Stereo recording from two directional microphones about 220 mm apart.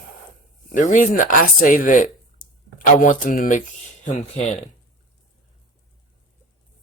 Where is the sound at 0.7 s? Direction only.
35° left (ahead or behind).